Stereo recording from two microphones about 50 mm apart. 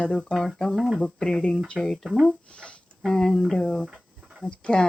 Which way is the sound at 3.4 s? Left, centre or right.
Centre.